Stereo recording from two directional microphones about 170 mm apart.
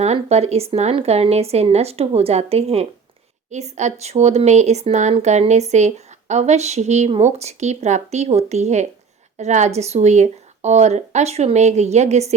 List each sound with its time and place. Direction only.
0.0 s speech: 40° right (ahead or behind)